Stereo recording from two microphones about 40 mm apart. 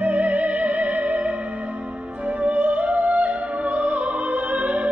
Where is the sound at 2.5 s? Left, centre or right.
Right.